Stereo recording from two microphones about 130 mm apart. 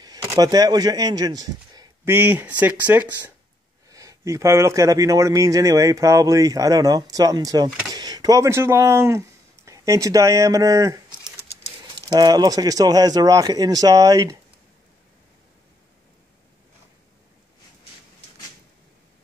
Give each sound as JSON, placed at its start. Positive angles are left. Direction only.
{"t": 0.0, "sound": "a sound", "side_deg": -25}
{"t": 0.5, "sound": "a man's voice", "side_deg": -30}
{"t": 2.0, "sound": "speech", "side_deg": -15}
{"t": 3.9, "sound": "a man's voice", "side_deg": -25}